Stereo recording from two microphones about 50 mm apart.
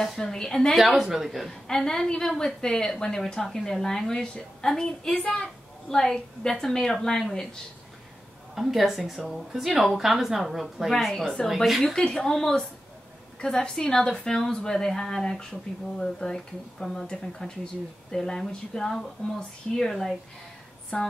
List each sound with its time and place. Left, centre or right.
0.2 s a woman's voice: centre
0.7 s a woman's voice: centre
1.5 s a woman's voice: centre
5.1 s a woman's voice: left
5.9 s a woman's voice: centre
8.5 s a woman's voice: centre
11.8 s a woman's voice: centre